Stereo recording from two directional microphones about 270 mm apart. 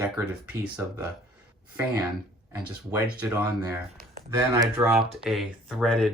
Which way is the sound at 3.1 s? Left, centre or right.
Centre.